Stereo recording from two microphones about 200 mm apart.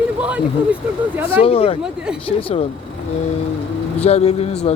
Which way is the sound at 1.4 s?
30° left (ahead or behind).